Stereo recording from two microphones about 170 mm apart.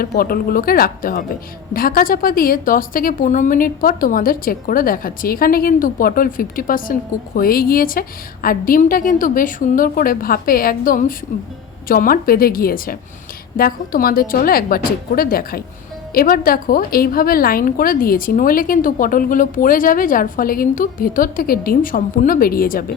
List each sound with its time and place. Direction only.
0.0 s a woman's voice: 60° left (ahead or behind)